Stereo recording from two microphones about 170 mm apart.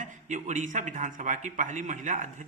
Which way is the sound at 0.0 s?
45° right (ahead or behind).